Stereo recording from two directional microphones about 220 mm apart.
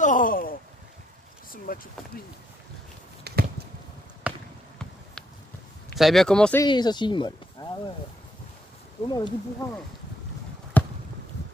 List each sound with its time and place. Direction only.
0.0 s a sound: 35° left (ahead or behind)
1.7 s speech: 40° left (ahead or behind)
3.3 s a sound: 45° right (ahead or behind)
4.2 s basketball bounce: 5° right (ahead or behind)
5.9 s speech: centre (ahead or behind)
6.6 s speech: 20° left (ahead or behind)
9.0 s speech: 20° left (ahead or behind)
10.8 s basketball bounce: 5° left (ahead or behind)